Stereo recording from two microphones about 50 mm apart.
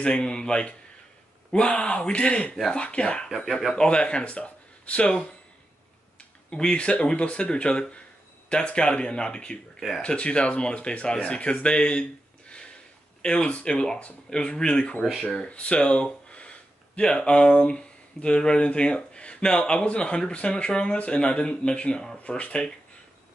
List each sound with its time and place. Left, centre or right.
0.0 s speech: centre
6.5 s speech: centre
9.8 s speech: centre
10.0 s speech: left